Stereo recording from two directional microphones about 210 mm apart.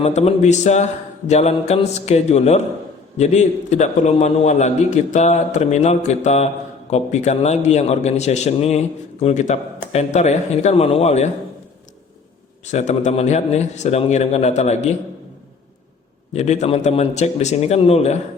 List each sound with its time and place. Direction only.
0.0 s a man's voice: 30° left (ahead or behind)
12.7 s a man's voice: 35° left (ahead or behind)
16.3 s a man's voice: 30° left (ahead or behind)